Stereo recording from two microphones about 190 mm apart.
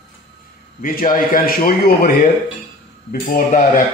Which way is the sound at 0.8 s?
45° left (ahead or behind).